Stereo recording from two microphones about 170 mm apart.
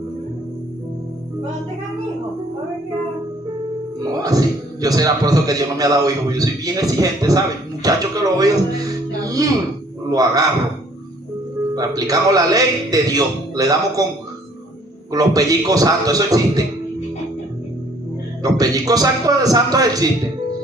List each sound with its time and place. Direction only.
4.1 s a man's voice: 20° right (ahead or behind)
10.1 s a man's voice: 20° right (ahead or behind)
11.7 s a man's voice: 20° right (ahead or behind)
15.1 s a man's voice: 20° right (ahead or behind)
18.4 s a man's voice: 20° right (ahead or behind)